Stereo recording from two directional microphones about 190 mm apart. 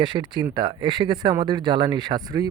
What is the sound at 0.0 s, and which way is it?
Speech, 25° right (ahead or behind).